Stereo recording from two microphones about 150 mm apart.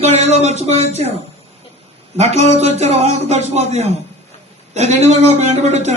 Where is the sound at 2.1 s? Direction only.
45° right (ahead or behind).